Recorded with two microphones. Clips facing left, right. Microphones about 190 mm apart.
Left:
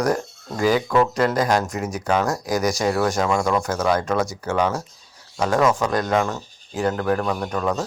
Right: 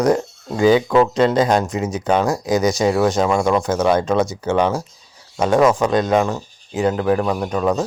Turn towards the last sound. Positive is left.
turn(degrees=-15)  # may be behind; listen again after turning